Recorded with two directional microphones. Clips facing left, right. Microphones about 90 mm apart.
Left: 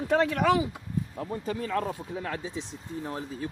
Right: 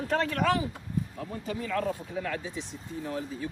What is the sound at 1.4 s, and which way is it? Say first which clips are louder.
Speech: even; 35° left (ahead or behind).